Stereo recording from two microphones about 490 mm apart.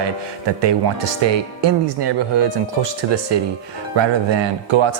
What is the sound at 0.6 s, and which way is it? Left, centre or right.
Speech, right.